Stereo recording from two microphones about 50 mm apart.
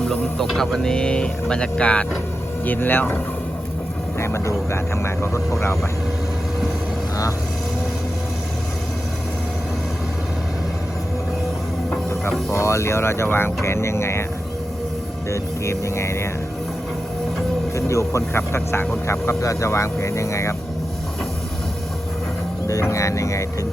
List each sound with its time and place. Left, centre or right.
0.0 s speech: centre
0.4 s speech: centre; by 2.0 s left
2.6 s speech: left
4.2 s speech: left
12.5 s speech: left
15.3 s speech: left
17.7 s speech: left
18.3 s speech: left
22.6 s speech: left